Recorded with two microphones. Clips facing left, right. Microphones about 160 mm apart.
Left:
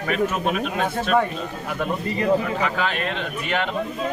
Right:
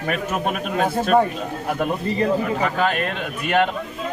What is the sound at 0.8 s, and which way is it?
Speech, 35° right (ahead or behind).